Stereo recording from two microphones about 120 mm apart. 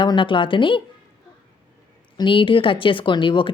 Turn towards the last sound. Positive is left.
turn(degrees=45)  # may be behind; listen again after turning